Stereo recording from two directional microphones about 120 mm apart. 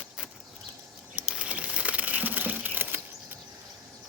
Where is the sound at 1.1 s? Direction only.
10° right (ahead or behind).